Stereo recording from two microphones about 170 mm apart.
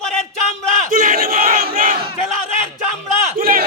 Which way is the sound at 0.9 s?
55° right (ahead or behind).